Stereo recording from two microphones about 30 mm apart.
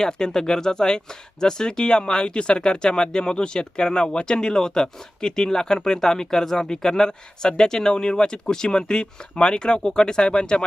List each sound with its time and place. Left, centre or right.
0.0 s speech: left